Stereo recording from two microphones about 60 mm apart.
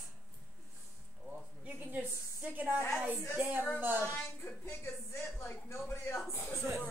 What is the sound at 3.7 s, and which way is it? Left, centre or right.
Speech, right.